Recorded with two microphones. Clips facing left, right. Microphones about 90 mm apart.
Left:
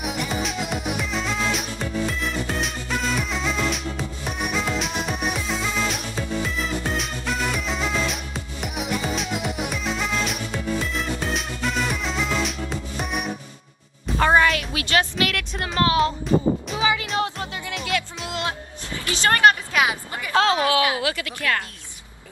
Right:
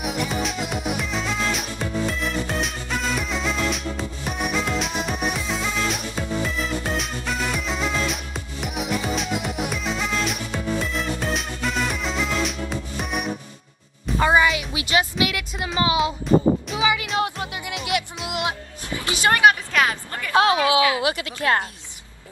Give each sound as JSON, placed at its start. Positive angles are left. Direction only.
{"t": 0.0, "sound": "music", "side_deg": 0}
{"t": 17.2, "sound": "music", "side_deg": -20}
{"t": 19.7, "sound": "a sound", "side_deg": 10}
{"t": 20.3, "sound": "a woman's voice", "side_deg": -20}